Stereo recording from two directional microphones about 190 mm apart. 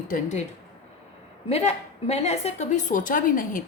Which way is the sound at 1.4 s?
35° left (ahead or behind).